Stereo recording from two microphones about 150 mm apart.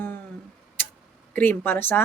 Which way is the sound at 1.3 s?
15° left (ahead or behind).